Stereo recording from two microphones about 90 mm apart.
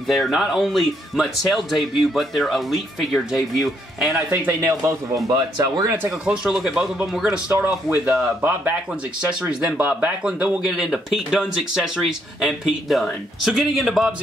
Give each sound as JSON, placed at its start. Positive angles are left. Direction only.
{"t": 0.1, "sound": "speech", "side_deg": 0}
{"t": 4.3, "sound": "speech", "side_deg": -15}
{"t": 4.6, "sound": "speech", "side_deg": -40}
{"t": 6.0, "sound": "speech", "side_deg": -10}